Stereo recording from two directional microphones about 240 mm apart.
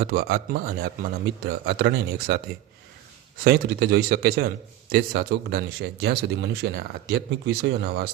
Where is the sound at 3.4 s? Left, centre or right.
Right.